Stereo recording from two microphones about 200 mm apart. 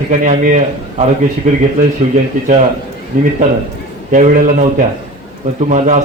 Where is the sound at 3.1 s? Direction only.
45° right (ahead or behind).